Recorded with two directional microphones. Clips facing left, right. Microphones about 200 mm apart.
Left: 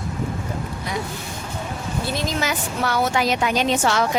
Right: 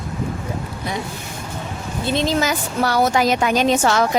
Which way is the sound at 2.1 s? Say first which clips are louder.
Right 8 dB; 25° right (ahead or behind).